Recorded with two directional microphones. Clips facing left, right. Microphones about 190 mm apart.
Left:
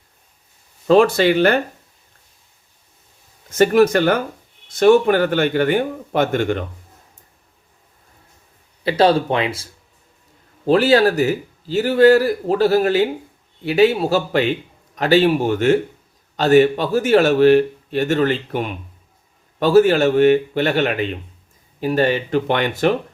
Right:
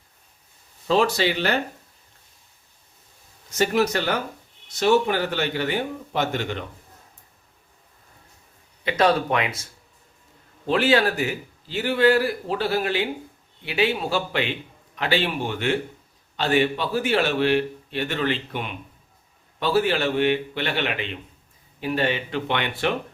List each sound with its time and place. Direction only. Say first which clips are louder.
0.9 s a man's voice: left 8 dB; 55° left (ahead or behind)
3.5 s a man's voice: left 8 dB; 50° left (ahead or behind)
8.8 s a man's voice: left 5 dB; 35° left (ahead or behind)
10.7 s a man's voice: left 6 dB; 40° left (ahead or behind)